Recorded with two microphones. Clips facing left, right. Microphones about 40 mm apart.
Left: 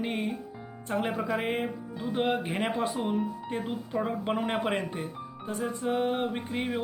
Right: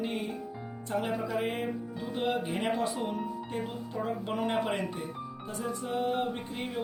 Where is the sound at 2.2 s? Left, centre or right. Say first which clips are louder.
Left 2 dB; left.